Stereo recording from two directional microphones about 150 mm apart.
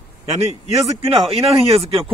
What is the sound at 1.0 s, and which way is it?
Speech, 40° right (ahead or behind).